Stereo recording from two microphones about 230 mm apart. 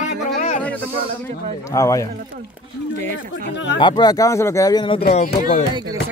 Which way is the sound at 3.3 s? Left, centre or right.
Left.